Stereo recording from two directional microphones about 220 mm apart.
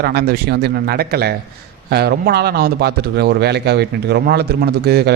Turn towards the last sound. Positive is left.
turn(degrees=-45)  # may be behind; listen again after turning